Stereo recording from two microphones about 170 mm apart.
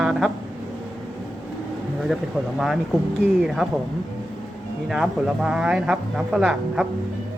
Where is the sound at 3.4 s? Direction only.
Centre (ahead or behind).